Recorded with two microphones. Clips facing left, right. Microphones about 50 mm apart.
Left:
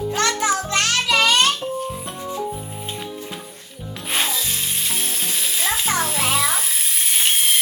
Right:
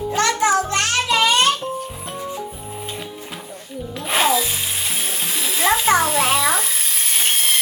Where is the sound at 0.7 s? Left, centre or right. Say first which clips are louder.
Even; right.